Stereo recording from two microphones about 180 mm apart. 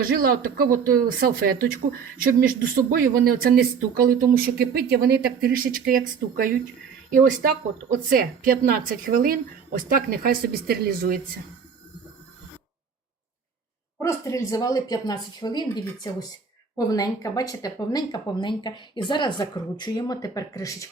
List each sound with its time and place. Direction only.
0.0 s speech: 55° right (ahead or behind)
14.0 s speech: 15° left (ahead or behind)